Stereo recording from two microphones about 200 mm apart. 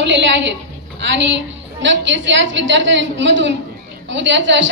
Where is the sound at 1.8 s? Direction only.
65° right (ahead or behind).